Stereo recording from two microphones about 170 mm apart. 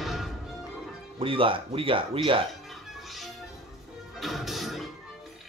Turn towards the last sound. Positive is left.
turn(degrees=0)  # may be behind; listen again after turning